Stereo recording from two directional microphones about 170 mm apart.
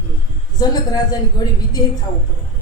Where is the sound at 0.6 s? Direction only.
25° left (ahead or behind).